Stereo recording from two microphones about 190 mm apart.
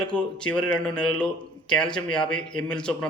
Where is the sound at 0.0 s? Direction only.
5° left (ahead or behind).